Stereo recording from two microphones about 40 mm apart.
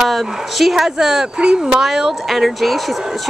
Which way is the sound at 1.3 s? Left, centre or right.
Right.